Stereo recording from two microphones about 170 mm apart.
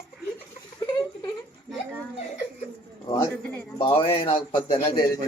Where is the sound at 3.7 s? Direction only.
30° left (ahead or behind).